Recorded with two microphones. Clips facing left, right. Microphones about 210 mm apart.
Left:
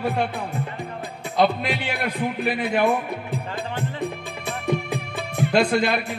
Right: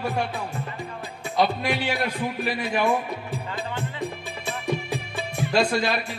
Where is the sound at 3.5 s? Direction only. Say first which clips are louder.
Left 2 dB; 55° left (ahead or behind).